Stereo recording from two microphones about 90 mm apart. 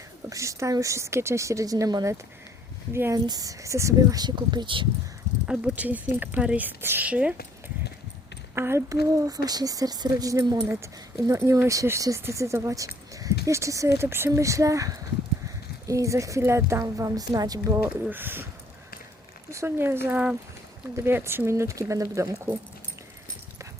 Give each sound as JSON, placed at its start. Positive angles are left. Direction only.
{"t": 0.3, "sound": "speech", "side_deg": -35}
{"t": 2.9, "sound": "speech", "side_deg": -30}
{"t": 3.2, "sound": "speech", "side_deg": -45}
{"t": 4.2, "sound": "speech", "side_deg": -55}
{"t": 5.5, "sound": "speech", "side_deg": -15}
{"t": 8.5, "sound": "speech", "side_deg": -30}
{"t": 18.1, "sound": "speech", "side_deg": -25}
{"t": 19.5, "sound": "speech", "side_deg": -30}